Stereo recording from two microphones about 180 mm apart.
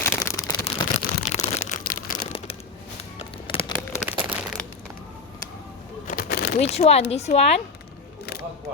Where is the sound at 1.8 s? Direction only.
50° left (ahead or behind).